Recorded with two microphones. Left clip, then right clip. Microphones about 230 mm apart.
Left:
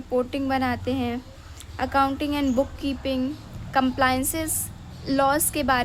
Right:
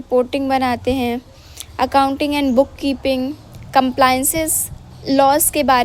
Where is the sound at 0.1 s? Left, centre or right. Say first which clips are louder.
Right 8 dB; centre.